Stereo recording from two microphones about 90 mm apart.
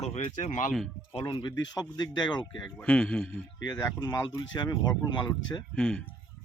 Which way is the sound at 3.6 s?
50° left (ahead or behind).